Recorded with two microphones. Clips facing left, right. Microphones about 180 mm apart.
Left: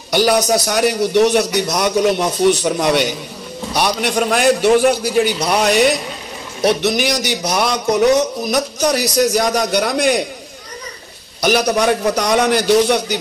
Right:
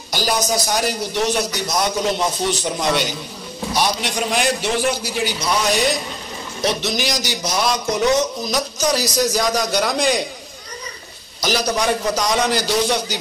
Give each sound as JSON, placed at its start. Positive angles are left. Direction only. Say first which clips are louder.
{"t": 0.1, "sound": "a man's voice", "louder": "left 7 dB", "side_deg": 65}
{"t": 11.4, "sound": "a man's voice", "louder": "left 5 dB", "side_deg": 60}